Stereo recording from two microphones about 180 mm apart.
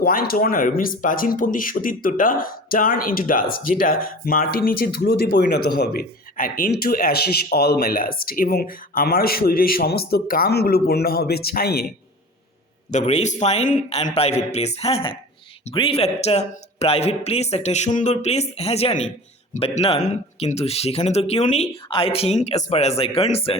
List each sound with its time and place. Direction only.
0.0 s speech: 55° left (ahead or behind)
12.9 s speech: 40° left (ahead or behind)